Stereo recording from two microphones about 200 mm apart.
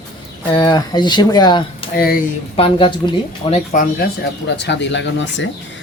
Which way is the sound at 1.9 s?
45° left (ahead or behind).